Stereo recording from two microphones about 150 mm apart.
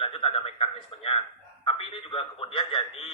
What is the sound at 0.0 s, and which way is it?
A man's voice, 40° left (ahead or behind).